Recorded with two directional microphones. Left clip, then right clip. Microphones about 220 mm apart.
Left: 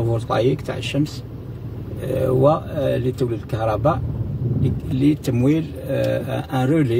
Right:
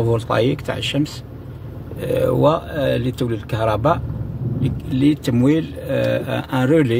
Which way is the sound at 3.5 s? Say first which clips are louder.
Right 3 dB; 20° right (ahead or behind).